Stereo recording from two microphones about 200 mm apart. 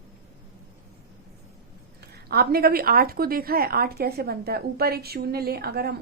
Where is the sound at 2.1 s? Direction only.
50° right (ahead or behind).